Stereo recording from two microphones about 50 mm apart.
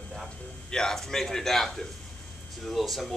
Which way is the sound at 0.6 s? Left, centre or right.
Centre.